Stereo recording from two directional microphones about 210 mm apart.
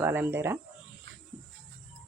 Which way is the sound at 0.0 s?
10° right (ahead or behind).